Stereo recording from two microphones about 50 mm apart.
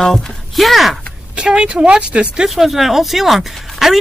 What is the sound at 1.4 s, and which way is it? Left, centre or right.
Speech, right.